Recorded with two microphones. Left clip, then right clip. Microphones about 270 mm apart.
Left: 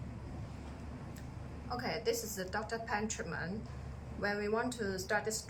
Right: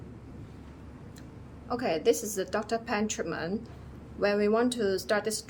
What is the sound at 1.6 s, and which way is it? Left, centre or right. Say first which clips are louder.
A woman's voice: right 10 dB; right.